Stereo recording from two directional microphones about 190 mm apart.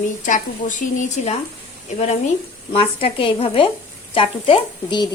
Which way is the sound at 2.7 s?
30° left (ahead or behind).